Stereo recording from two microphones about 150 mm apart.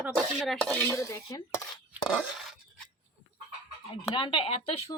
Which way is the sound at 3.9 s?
30° left (ahead or behind).